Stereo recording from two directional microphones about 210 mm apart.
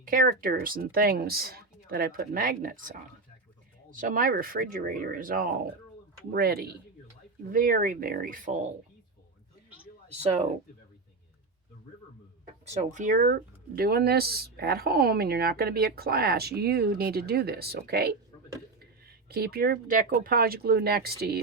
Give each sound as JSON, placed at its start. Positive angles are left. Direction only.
{"t": 0.0, "sound": "speech", "side_deg": -40}
{"t": 12.6, "sound": "speech", "side_deg": -30}